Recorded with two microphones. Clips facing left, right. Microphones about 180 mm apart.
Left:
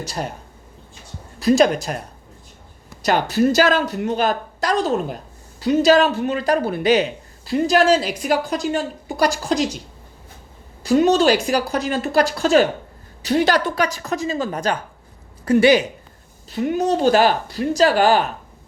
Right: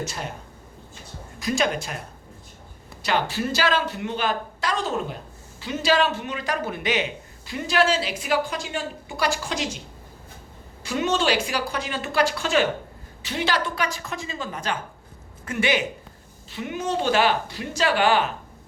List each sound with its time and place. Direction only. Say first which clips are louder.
0.0 s speech: left 4 dB; 40° left (ahead or behind)
1.4 s speech: left 9 dB; 35° left (ahead or behind)
3.0 s speech: left 7 dB; 40° left (ahead or behind)
10.8 s speech: left 8 dB; 40° left (ahead or behind)